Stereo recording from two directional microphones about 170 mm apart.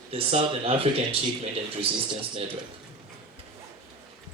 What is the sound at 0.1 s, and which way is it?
A man's voice, 35° right (ahead or behind).